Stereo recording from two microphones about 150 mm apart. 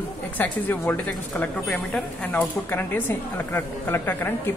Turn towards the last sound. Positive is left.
turn(degrees=15)  # may be behind; listen again after turning